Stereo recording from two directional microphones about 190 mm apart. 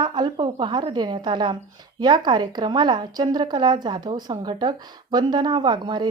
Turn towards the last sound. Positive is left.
turn(degrees=-25)  # may be behind; listen again after turning